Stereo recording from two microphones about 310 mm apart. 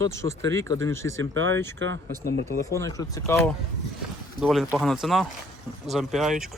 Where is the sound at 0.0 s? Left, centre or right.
Right.